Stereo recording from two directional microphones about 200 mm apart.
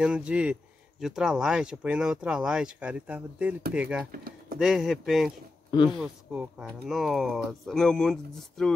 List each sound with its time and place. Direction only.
0.0 s speech: 5° right (ahead or behind)
4.1 s speech: 45° right (ahead or behind)
4.6 s speech: centre (ahead or behind)